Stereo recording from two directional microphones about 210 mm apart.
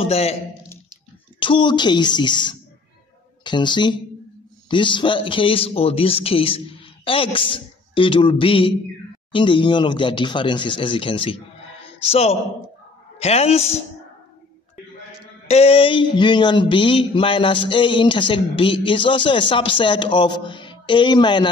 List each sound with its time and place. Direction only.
0.0 s speech: 30° left (ahead or behind)
1.4 s speech: 25° left (ahead or behind)
15.4 s speech: 30° left (ahead or behind)